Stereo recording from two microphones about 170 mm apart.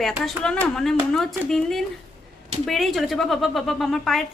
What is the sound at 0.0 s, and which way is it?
Speech, 5° left (ahead or behind).